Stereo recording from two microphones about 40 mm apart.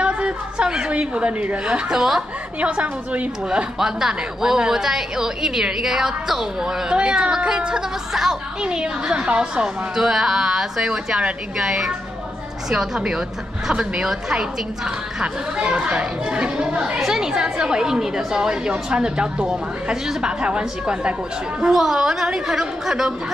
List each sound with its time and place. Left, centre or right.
0.0 s a woman's voice: right
1.7 s a woman's voice: centre
2.6 s a woman's voice: right
3.4 s a woman's voice: centre
6.9 s a woman's voice: right
8.6 s a woman's voice: right
15.8 s a woman's voice: right